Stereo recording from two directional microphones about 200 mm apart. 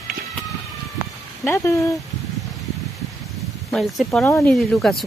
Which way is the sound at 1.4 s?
15° left (ahead or behind).